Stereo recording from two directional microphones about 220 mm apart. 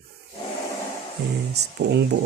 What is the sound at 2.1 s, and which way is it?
Speech, 50° right (ahead or behind).